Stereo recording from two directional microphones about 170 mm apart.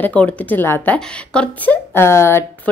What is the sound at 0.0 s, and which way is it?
A woman's voice, 5° left (ahead or behind).